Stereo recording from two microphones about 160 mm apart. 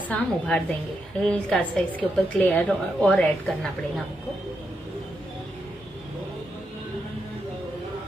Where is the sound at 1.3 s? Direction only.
10° left (ahead or behind).